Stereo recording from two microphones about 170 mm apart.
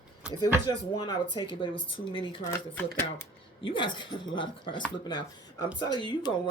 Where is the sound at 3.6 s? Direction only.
30° left (ahead or behind).